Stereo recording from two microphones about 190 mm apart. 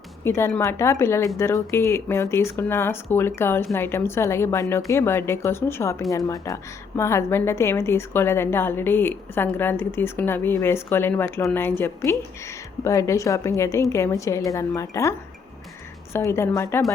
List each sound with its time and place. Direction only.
0.3 s speech: 15° left (ahead or behind)
16.1 s speech: 15° left (ahead or behind)